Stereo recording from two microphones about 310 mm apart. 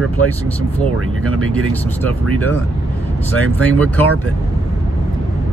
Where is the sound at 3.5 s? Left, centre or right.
Centre.